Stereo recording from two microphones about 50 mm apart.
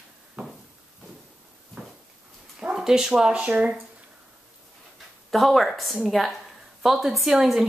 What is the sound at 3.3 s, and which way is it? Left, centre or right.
Speech, right.